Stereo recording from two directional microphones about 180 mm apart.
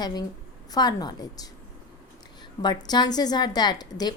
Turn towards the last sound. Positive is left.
turn(degrees=20)  # may be behind; listen again after turning